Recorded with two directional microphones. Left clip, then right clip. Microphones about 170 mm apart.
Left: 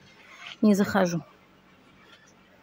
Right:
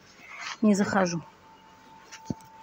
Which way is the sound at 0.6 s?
20° left (ahead or behind).